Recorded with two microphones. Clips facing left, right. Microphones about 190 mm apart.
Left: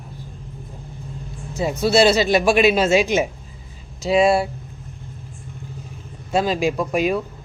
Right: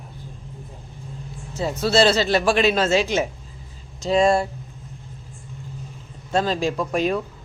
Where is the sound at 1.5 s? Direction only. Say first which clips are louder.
Left 3 dB; 10° left (ahead or behind).